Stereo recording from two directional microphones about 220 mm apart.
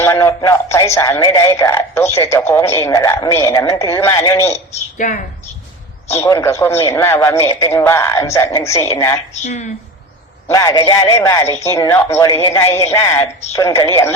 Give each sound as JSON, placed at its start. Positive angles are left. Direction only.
{"t": 0.0, "sound": "a man's voice", "side_deg": 15}
{"t": 4.7, "sound": "a woman's voice", "side_deg": 35}
{"t": 6.1, "sound": "a man's voice", "side_deg": 15}
{"t": 9.3, "sound": "speech", "side_deg": 30}
{"t": 10.5, "sound": "a man's voice", "side_deg": 15}